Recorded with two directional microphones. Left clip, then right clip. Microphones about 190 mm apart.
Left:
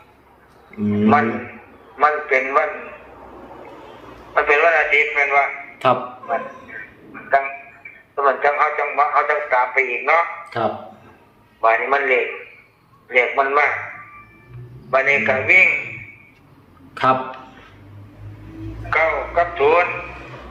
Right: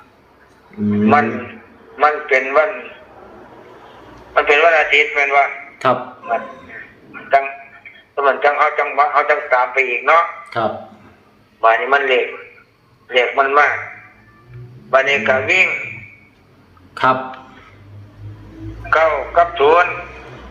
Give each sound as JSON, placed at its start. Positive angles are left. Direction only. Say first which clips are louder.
{"t": 0.9, "sound": "a man's voice", "louder": "right 2 dB", "side_deg": -15}
{"t": 4.4, "sound": "a man's voice", "louder": "right 3 dB", "side_deg": -15}
{"t": 8.1, "sound": "a man's voice", "louder": "right 3 dB", "side_deg": -15}
{"t": 14.8, "sound": "a man's voice", "louder": "right 3 dB", "side_deg": -15}
{"t": 16.9, "sound": "speech", "louder": "right 2 dB", "side_deg": -20}
{"t": 18.9, "sound": "a man's voice", "louder": "right 4 dB", "side_deg": -15}